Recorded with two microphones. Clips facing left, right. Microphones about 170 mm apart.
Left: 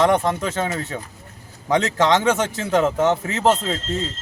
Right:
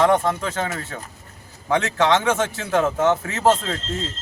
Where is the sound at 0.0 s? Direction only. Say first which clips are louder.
Even; 20° left (ahead or behind).